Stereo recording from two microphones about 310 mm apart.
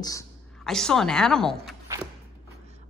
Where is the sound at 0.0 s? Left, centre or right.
Centre.